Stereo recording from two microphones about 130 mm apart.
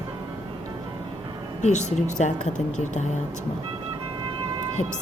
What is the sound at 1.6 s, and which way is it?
A woman's voice, 65° left (ahead or behind).